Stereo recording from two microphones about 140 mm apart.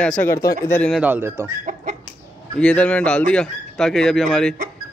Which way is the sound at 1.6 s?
70° right (ahead or behind).